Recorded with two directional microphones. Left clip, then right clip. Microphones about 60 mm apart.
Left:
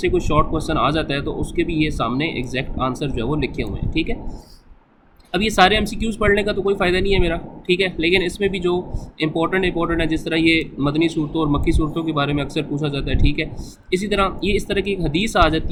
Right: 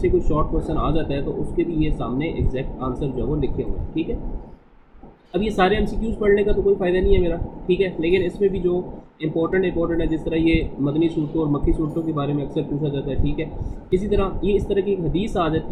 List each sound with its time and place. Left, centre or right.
0.0 s speech: left
5.5 s speech: left